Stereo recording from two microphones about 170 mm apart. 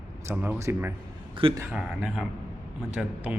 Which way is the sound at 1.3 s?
30° right (ahead or behind).